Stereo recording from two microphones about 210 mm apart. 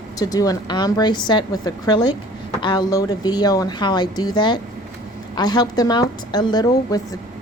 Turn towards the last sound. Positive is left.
turn(degrees=20)  # may be behind; listen again after turning